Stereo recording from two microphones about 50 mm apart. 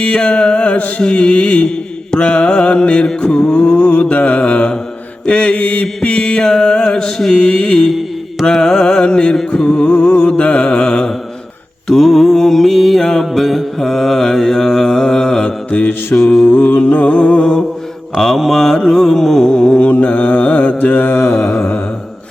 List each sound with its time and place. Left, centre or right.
0.0 s music: left
3.1 s mantra: centre
7.3 s music: centre
7.9 s mantra: centre
8.4 s music: centre
11.9 s mantra: centre
15.7 s mantra: left
16.1 s music: centre
16.6 s music: left; by 17.6 s centre
18.3 s mantra: centre
18.9 s music: centre
19.8 s mantra: left
20.7 s mantra: left